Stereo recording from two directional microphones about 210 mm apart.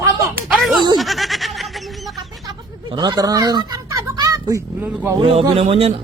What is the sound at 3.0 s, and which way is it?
A child's voice, 20° right (ahead or behind).